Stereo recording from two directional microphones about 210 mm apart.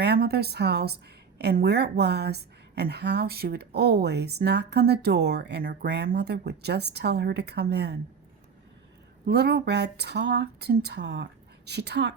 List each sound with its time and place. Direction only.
0.0 s a woman's voice: 50° right (ahead or behind)
9.2 s a woman's voice: 50° right (ahead or behind)